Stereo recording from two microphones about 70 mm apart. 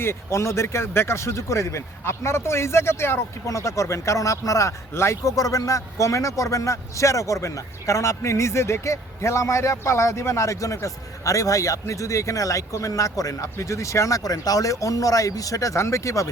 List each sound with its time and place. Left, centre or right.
0.0 s a man's voice: left